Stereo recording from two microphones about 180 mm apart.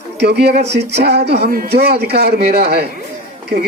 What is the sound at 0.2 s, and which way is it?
Speech, 65° right (ahead or behind).